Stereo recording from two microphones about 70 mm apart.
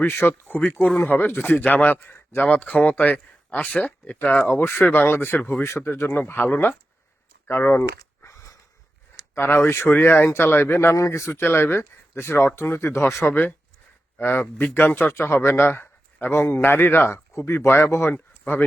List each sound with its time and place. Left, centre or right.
0.0 s a man's voice: left
4.4 s a man's voice: left
5.4 s speech: left
5.6 s a man's voice: left
7.4 s a sound: left
9.3 s a man's voice: left
11.3 s a man's voice: left
13.2 s a man's voice: left